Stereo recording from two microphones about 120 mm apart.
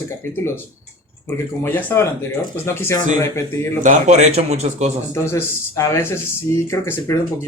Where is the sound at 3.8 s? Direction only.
90° right; by 4.9 s 65° right (ahead or behind).